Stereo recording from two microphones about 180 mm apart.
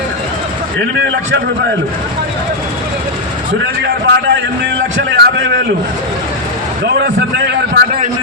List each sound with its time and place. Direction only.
3.8 s a man's voice: 70° right (ahead or behind)
4.9 s a sound: 75° right (ahead or behind)
6.8 s a man's voice: 70° right (ahead or behind)